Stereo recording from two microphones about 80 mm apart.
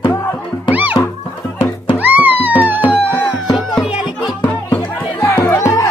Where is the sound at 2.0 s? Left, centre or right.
Right.